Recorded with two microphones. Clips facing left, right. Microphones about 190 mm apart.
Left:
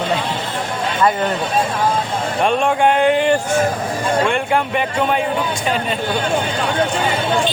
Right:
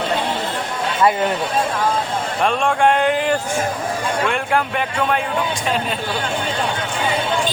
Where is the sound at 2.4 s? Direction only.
Centre (ahead or behind).